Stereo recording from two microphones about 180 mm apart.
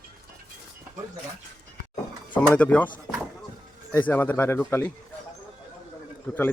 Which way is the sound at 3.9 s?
10° left (ahead or behind).